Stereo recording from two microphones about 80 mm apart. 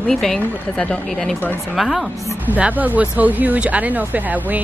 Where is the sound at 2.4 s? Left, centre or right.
Right.